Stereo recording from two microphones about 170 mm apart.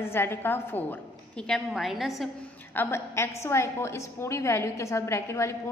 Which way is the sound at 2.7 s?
15° left (ahead or behind).